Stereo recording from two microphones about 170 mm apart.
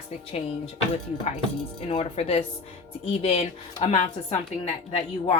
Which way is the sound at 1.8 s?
35° left (ahead or behind).